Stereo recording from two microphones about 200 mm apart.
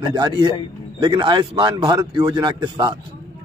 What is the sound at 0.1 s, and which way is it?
A man's voice, 20° right (ahead or behind).